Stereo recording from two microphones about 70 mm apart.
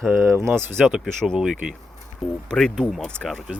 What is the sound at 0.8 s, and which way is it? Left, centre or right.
Speech, centre.